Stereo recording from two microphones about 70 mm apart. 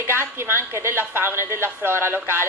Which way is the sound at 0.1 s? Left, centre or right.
Right.